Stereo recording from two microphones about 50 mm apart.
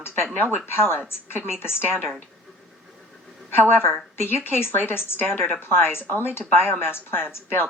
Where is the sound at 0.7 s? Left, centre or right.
Left.